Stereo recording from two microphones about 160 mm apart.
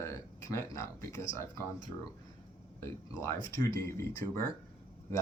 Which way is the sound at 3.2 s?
20° left (ahead or behind).